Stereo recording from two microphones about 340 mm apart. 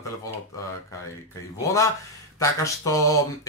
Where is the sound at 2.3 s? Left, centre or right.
Centre.